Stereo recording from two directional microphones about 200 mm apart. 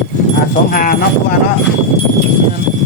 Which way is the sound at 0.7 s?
45° left (ahead or behind).